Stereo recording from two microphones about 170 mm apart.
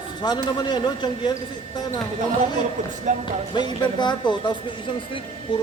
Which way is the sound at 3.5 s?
25° left (ahead or behind).